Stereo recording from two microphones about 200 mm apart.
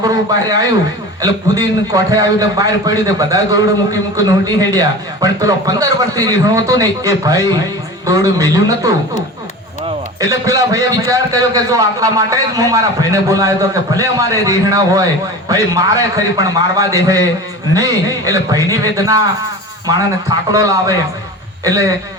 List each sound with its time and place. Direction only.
0.0 s a sound: 20° right (ahead or behind)
1.2 s a man's voice: 20° right (ahead or behind)
10.2 s a man's voice: 15° right (ahead or behind)
18.3 s a man's voice: 15° right (ahead or behind)
20.5 s a man's voice: 15° right (ahead or behind)